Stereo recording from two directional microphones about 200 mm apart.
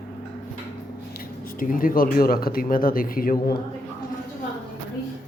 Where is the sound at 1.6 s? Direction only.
45° left (ahead or behind).